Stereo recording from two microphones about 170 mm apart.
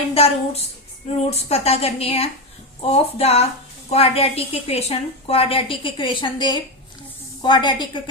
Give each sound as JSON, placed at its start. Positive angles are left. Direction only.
{"t": 0.1, "sound": "a woman's voice", "side_deg": 35}